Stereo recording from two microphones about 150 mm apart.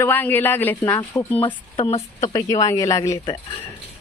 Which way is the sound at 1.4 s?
40° left (ahead or behind).